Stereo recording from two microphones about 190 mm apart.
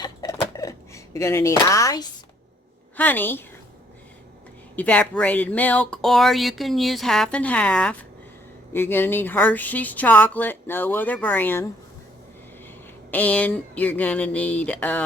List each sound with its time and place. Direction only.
0.0 s a sound: 20° left (ahead or behind)
3.0 s speech: 10° left (ahead or behind)
4.8 s speech: 5° left (ahead or behind)
13.1 s speech: 10° left (ahead or behind)